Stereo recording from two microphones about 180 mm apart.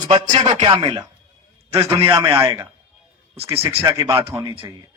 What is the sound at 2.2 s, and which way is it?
Speech, 15° right (ahead or behind).